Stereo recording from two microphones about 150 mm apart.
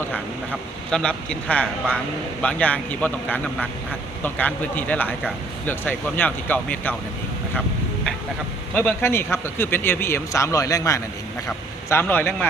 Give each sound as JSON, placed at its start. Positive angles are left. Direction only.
{"t": 0.9, "sound": "speech", "side_deg": 5}
{"t": 8.7, "sound": "speech", "side_deg": 10}